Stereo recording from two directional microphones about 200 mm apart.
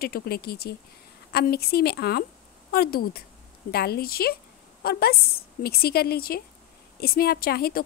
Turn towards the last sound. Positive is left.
turn(degrees=50)  # may be behind; listen again after turning